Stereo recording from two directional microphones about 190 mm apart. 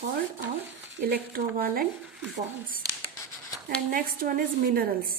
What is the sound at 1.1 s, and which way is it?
Speech, 50° right (ahead or behind).